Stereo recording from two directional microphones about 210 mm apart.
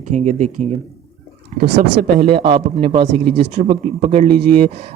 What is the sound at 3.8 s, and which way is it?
Speech, 30° right (ahead or behind).